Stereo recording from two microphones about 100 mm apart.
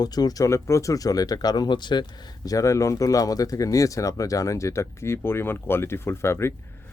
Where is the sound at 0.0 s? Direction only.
40° left (ahead or behind).